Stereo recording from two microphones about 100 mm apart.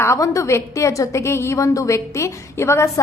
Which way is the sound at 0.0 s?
30° left (ahead or behind).